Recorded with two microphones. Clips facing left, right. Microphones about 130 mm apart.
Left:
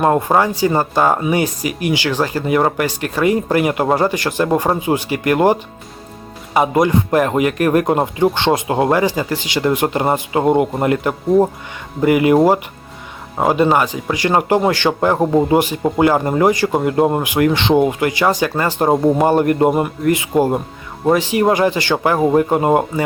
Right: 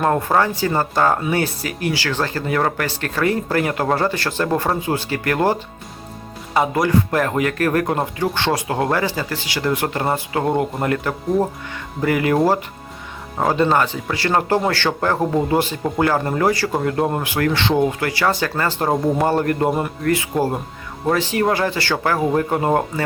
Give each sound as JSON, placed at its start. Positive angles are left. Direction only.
{"t": 0.0, "sound": "speech", "side_deg": 20}
{"t": 11.3, "sound": "speech", "side_deg": 0}
{"t": 12.0, "sound": "speech", "side_deg": 20}
{"t": 13.4, "sound": "speech", "side_deg": 15}